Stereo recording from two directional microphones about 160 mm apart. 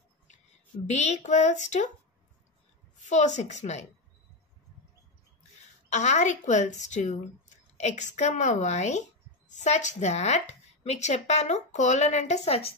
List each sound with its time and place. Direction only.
0.9 s speech: 45° left (ahead or behind)
3.0 s speech: 45° left (ahead or behind)
5.9 s speech: 45° left (ahead or behind)